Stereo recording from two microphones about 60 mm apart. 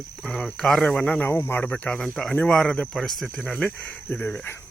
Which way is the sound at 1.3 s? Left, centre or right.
Left.